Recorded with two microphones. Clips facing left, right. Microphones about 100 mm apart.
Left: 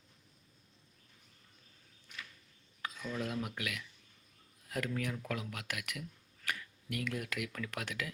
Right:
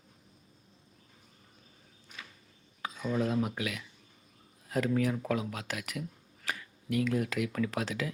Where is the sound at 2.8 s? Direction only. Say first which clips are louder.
Right 8 dB; 25° right (ahead or behind).